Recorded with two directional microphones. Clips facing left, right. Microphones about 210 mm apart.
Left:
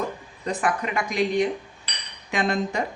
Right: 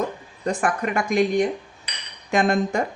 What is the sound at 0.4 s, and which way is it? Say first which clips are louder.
Speech: right 2 dB; 50° right (ahead or behind).